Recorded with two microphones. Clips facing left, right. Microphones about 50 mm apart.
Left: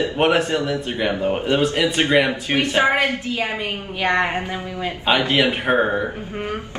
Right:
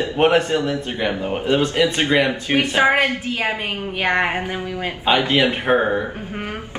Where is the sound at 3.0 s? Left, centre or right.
Right.